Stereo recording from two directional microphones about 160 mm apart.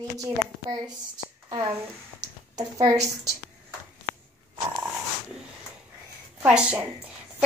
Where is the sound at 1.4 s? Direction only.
30° right (ahead or behind).